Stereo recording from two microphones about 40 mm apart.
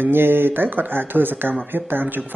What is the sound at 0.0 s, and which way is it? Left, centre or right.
Speech, right.